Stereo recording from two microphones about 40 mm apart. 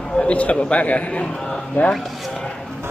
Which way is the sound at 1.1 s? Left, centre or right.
Centre.